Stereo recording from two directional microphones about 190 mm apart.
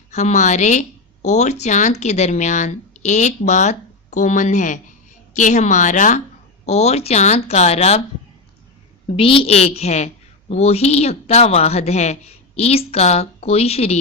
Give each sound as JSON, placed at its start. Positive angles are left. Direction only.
{"t": 0.1, "sound": "speech", "side_deg": 40}
{"t": 9.0, "sound": "speech", "side_deg": 30}